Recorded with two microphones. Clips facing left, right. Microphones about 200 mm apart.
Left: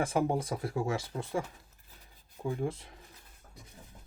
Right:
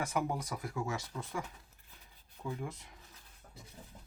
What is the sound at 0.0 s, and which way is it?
Speech, 30° left (ahead or behind).